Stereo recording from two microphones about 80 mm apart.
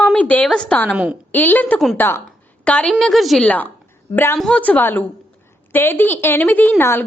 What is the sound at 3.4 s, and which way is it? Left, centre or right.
Speech, centre.